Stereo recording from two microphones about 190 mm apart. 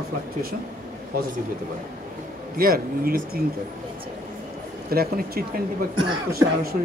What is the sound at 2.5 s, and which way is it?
Speech, 50° right (ahead or behind).